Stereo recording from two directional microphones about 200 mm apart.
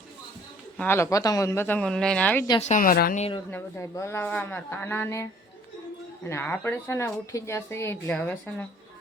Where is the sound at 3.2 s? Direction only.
25° left (ahead or behind).